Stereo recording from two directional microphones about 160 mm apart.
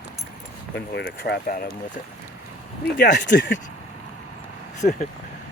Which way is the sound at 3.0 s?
90° left.